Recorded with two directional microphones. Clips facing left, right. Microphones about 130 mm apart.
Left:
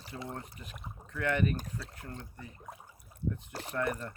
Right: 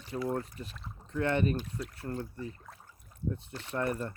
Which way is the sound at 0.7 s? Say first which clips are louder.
Left 1 dB; 15° left (ahead or behind).